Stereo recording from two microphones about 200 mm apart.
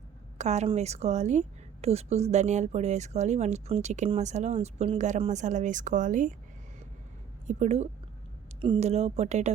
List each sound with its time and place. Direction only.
0.3 s a woman's voice: 35° right (ahead or behind)
7.4 s a woman's voice: 35° right (ahead or behind)